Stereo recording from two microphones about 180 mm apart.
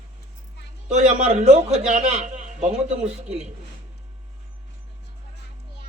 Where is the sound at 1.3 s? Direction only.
40° right (ahead or behind).